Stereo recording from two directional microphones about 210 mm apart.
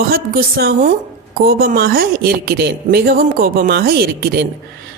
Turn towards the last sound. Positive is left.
turn(degrees=-50)  # may be behind; listen again after turning